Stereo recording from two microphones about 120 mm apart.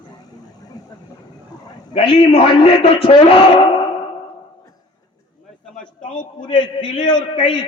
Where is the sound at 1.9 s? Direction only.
50° left (ahead or behind).